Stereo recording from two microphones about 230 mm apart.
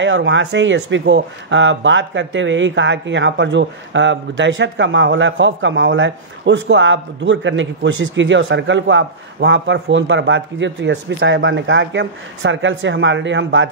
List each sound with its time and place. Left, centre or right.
0.0 s speech: right